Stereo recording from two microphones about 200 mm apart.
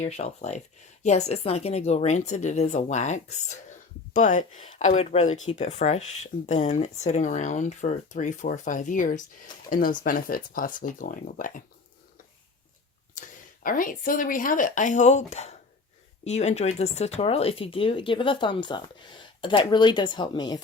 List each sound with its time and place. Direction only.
0.0 s speech: 35° left (ahead or behind)
13.1 s speech: 40° left (ahead or behind); by 20.6 s 20° left (ahead or behind)